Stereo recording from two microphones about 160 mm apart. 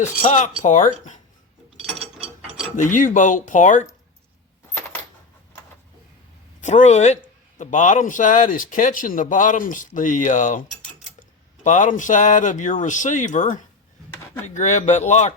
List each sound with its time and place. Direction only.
0.0 s a man's voice: 50° left (ahead or behind)
2.7 s a man's voice: 55° left (ahead or behind)
6.6 s a man's voice: 50° left (ahead or behind)